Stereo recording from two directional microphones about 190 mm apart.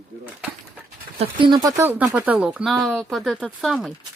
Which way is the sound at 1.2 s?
25° right (ahead or behind).